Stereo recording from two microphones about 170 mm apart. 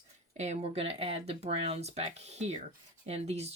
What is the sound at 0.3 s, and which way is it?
Speech, 40° right (ahead or behind).